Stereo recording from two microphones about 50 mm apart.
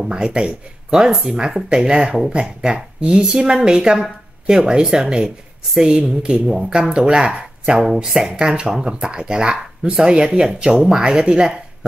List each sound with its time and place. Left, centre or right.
0.1 s a woman's voice: centre